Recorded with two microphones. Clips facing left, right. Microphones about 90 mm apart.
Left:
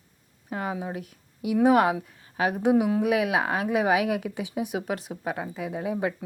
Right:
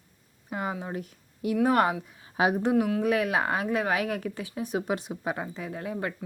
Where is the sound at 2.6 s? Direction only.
15° left (ahead or behind).